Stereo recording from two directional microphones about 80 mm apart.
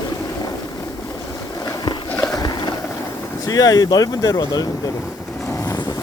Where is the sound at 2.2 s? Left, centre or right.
Left.